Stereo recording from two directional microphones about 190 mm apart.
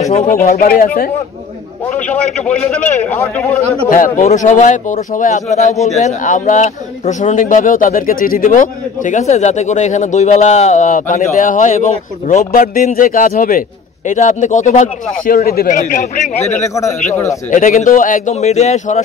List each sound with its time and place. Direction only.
0.0 s speech: 35° left (ahead or behind)
0.4 s speech: 50° left (ahead or behind)
2.4 s a man's voice: 5° left (ahead or behind)
3.9 s speech: 40° left (ahead or behind)
16.5 s speech: 15° left (ahead or behind)
17.5 s speech: 40° left (ahead or behind)